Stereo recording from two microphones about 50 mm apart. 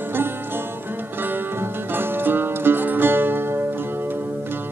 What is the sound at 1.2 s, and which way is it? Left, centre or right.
Music, right.